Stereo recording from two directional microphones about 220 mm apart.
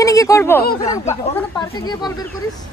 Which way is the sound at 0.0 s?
15° left (ahead or behind).